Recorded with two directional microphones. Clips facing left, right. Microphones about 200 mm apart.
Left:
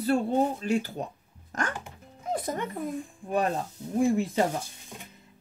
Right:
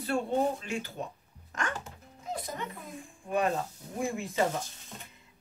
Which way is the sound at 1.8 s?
55° left (ahead or behind).